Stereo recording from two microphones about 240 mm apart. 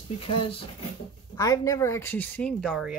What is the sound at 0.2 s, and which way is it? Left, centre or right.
Speech, left.